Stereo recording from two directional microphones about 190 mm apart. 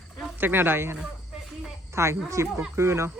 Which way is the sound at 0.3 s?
10° right (ahead or behind).